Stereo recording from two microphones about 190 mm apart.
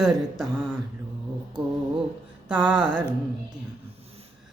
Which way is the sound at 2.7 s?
5° right (ahead or behind).